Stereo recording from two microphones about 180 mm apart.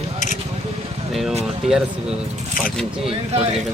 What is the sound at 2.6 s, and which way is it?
Speech, centre (ahead or behind).